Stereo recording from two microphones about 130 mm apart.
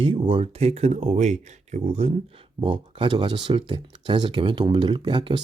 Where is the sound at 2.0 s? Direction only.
45° right (ahead or behind).